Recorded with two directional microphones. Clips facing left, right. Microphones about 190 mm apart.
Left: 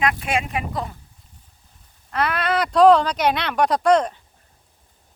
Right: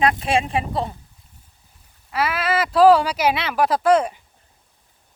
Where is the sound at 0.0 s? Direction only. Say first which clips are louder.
Right 3 dB; 30° right (ahead or behind).